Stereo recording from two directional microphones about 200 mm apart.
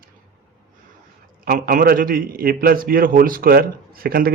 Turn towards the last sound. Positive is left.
turn(degrees=-50)  # may be behind; listen again after turning